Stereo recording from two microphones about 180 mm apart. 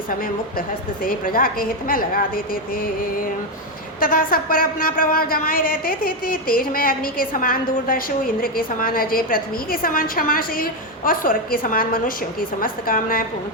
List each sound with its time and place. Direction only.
0.1 s a woman's voice: 50° left (ahead or behind)